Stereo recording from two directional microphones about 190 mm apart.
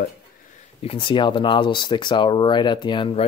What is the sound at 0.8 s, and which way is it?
Speech, 30° left (ahead or behind).